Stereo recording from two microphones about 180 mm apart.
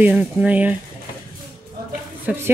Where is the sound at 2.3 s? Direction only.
5° right (ahead or behind).